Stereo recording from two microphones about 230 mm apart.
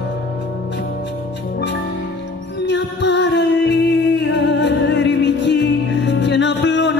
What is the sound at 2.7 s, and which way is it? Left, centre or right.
Music, left.